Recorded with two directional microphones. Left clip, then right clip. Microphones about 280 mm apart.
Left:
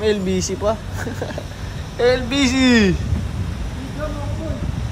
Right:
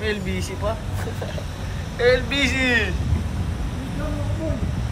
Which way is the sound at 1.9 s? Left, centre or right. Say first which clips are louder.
Left 2 dB; centre.